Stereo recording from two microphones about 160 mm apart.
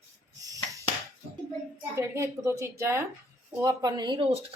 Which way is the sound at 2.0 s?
20° right (ahead or behind).